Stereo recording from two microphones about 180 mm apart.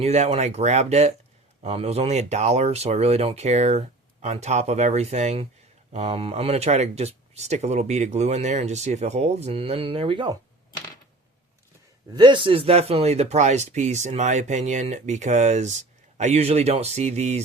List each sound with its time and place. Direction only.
0.0 s speech: 35° right (ahead or behind)
12.1 s speech: 25° right (ahead or behind)